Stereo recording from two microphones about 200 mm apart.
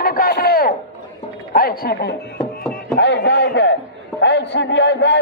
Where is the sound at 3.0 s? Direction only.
60° left (ahead or behind).